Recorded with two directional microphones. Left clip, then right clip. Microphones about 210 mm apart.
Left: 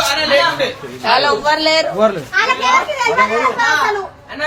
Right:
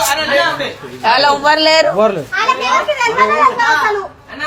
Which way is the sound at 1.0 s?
50° right (ahead or behind).